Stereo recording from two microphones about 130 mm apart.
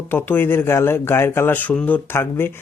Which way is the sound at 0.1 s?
15° left (ahead or behind).